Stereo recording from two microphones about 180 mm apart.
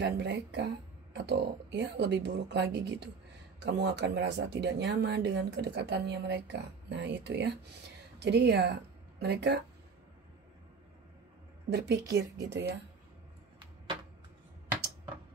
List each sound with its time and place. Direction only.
0.0 s speech: 75° right (ahead or behind)
11.7 s speech: 70° right (ahead or behind)